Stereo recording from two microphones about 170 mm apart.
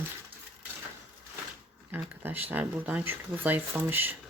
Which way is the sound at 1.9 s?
10° right (ahead or behind).